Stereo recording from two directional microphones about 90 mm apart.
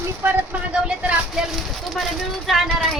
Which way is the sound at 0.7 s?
10° right (ahead or behind).